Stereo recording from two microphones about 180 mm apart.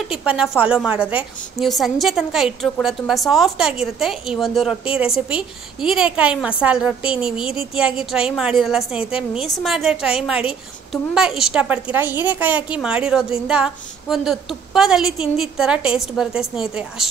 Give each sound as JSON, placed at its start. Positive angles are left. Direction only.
{"t": 0.1, "sound": "a woman's voice", "side_deg": -5}